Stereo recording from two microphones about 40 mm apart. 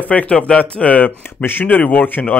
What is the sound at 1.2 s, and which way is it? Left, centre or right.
Speech, left.